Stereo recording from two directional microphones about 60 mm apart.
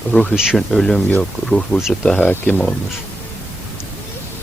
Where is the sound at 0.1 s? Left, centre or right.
Centre.